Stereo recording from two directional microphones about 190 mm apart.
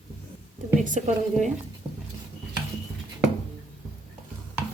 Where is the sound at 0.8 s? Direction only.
40° right (ahead or behind).